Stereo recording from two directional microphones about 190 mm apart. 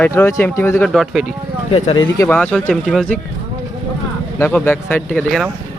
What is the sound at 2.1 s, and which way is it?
Speech, 10° left (ahead or behind).